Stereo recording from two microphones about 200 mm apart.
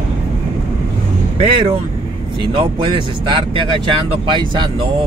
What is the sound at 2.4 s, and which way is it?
Speech, 25° right (ahead or behind).